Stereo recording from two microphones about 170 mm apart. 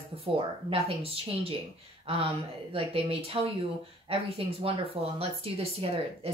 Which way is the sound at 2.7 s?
35° right (ahead or behind).